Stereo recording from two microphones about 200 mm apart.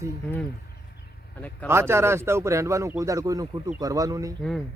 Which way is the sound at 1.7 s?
10° right (ahead or behind).